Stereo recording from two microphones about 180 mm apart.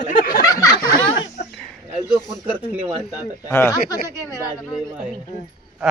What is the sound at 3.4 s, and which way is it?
Speech, 15° left (ahead or behind).